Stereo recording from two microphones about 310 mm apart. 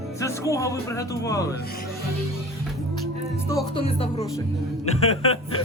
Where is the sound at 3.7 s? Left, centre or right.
Centre.